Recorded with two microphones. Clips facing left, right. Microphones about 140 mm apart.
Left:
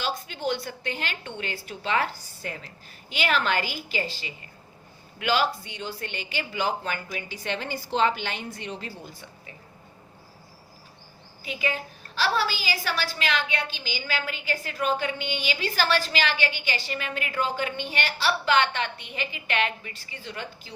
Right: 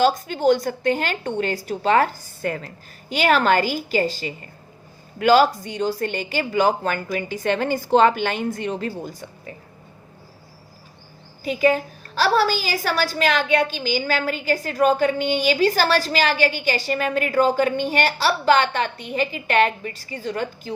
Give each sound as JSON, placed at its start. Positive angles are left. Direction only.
{"t": 0.0, "sound": "a woman's voice", "side_deg": -45}
{"t": 11.4, "sound": "a woman's voice", "side_deg": -45}